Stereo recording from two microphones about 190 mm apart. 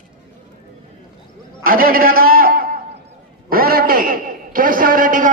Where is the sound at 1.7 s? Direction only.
50° right (ahead or behind).